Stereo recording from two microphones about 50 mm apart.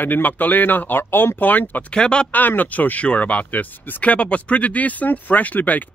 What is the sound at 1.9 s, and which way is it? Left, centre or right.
Speech, centre.